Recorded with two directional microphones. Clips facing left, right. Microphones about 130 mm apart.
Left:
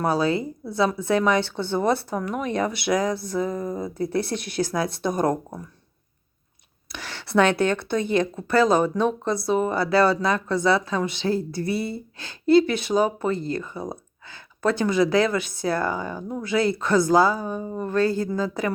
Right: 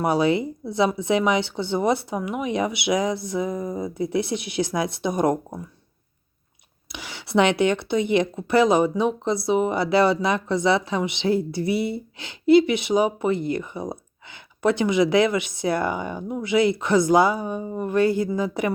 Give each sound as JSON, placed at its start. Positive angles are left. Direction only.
{"t": 0.0, "sound": "speech", "side_deg": -20}
{"t": 6.9, "sound": "speech", "side_deg": -15}